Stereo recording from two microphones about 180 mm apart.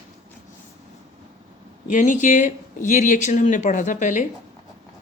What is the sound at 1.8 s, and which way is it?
Speech, 45° left (ahead or behind).